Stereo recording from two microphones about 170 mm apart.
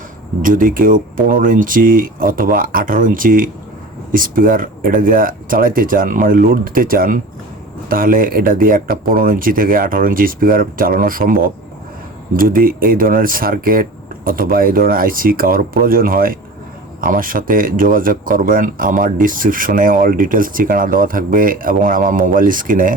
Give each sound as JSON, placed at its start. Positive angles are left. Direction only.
{"t": 0.4, "sound": "speech", "side_deg": -55}